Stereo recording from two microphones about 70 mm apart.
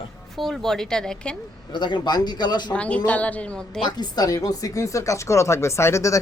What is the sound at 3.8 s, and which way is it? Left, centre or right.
Speech, left.